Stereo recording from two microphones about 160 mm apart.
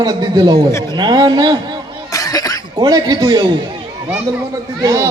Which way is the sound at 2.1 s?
20° left (ahead or behind).